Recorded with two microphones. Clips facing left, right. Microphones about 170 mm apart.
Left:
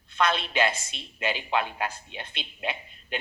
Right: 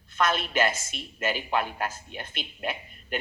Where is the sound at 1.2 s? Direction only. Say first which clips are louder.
Even; 10° right (ahead or behind).